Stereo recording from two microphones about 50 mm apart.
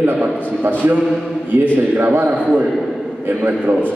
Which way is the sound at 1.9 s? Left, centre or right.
Right.